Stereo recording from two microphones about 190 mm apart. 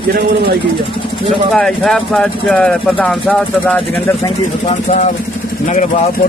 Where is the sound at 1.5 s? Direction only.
Centre (ahead or behind).